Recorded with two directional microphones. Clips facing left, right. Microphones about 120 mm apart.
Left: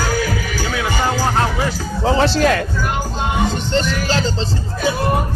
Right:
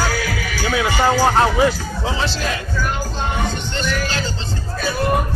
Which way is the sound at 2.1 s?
55° left (ahead or behind).